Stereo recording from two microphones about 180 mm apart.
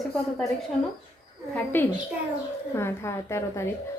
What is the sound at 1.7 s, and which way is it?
A woman's voice, 10° left (ahead or behind).